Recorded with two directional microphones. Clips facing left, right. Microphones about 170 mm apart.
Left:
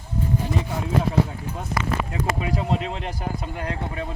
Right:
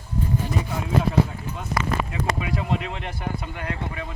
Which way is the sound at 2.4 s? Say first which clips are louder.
Left 2 dB; 35° left (ahead or behind).